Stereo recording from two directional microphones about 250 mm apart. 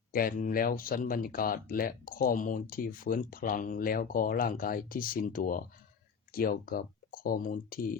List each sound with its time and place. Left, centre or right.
0.1 s speech: left